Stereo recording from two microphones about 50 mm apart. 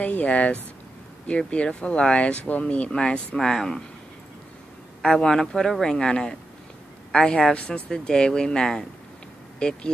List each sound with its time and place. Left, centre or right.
0.0 s speech: left
3.3 s speech: centre
5.0 s speech: centre